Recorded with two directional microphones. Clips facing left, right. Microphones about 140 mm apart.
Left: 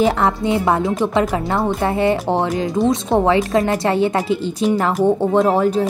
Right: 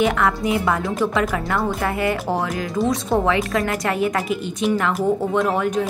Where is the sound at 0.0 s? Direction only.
30° left (ahead or behind).